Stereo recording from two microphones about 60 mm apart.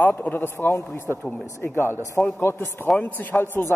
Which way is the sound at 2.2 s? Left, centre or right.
Left.